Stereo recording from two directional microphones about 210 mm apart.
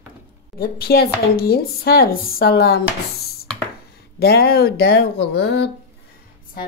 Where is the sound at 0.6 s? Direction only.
45° left (ahead or behind).